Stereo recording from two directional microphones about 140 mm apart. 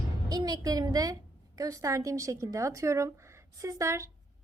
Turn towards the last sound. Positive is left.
turn(degrees=-20)  # may be behind; listen again after turning